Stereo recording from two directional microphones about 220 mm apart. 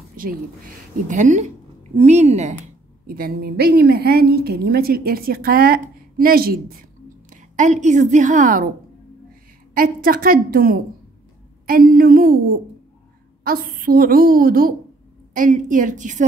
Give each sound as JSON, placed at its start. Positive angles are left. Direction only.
{"t": 0.1, "sound": "a sound", "side_deg": -40}
{"t": 1.0, "sound": "a woman's voice", "side_deg": -35}
{"t": 3.1, "sound": "a woman's voice", "side_deg": -40}
{"t": 9.8, "sound": "a woman's voice", "side_deg": -40}
{"t": 13.4, "sound": "a woman's voice", "side_deg": -40}